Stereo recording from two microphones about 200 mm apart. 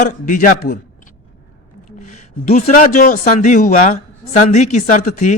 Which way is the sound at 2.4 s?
35° left (ahead or behind).